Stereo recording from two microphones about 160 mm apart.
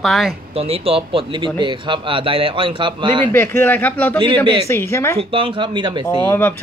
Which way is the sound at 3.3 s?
15° left (ahead or behind).